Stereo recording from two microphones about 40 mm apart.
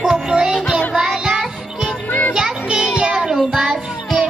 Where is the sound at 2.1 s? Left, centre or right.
Left.